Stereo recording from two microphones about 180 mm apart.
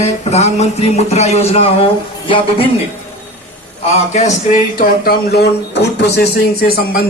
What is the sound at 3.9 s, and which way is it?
Speech, 40° left (ahead or behind).